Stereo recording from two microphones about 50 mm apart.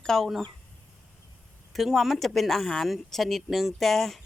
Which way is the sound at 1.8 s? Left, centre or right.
Centre.